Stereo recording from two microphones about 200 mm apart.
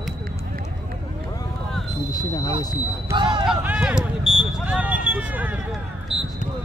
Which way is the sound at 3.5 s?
5° right (ahead or behind).